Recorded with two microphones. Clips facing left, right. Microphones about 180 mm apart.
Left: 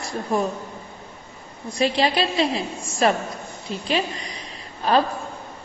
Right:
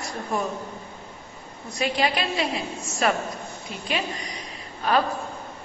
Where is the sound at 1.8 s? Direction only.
30° left (ahead or behind).